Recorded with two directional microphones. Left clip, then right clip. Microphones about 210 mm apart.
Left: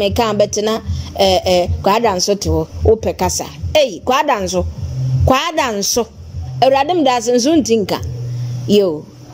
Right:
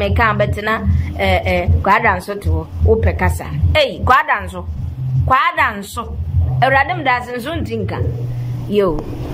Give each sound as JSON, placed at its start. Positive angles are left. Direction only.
{"t": 0.0, "sound": "a woman's voice", "side_deg": 35}